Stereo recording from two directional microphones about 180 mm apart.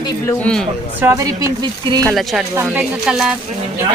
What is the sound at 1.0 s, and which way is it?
Speech, 15° right (ahead or behind).